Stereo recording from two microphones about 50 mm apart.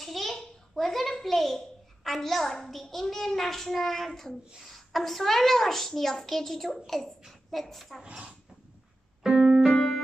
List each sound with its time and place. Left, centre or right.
0.0 s a sound: centre
2.0 s a child's voice: centre
8.0 s speech: centre
9.2 s keyboard: centre
9.7 s music: centre